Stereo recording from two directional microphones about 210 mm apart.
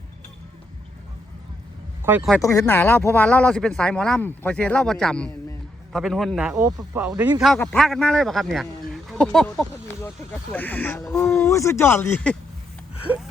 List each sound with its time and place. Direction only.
2.0 s speech: 10° right (ahead or behind)
2.3 s speech: 15° left (ahead or behind); by 6.5 s centre (ahead or behind)
6.5 s speech: 15° right (ahead or behind); by 12.4 s 5° left (ahead or behind)